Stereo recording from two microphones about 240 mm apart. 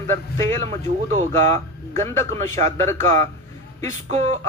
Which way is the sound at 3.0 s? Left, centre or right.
Right.